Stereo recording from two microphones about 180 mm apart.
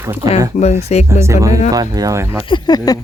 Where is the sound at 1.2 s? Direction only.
15° right (ahead or behind).